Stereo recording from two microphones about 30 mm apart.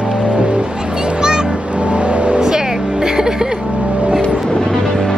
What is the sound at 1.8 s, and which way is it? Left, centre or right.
Vehicle, right.